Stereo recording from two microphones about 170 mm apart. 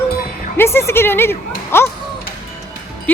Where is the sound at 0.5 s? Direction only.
15° left (ahead or behind).